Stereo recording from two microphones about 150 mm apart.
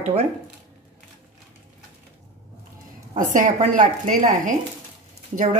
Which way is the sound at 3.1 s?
60° right (ahead or behind).